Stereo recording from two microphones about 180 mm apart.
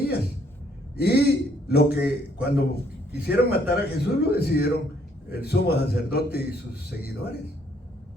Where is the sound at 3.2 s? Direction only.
60° left (ahead or behind).